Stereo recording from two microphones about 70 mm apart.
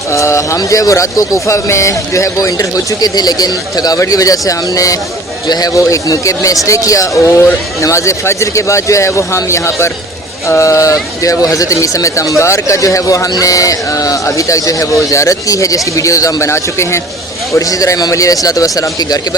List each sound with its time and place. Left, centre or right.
0.1 s speech: left
5.5 s speech: left
7.3 s speech: left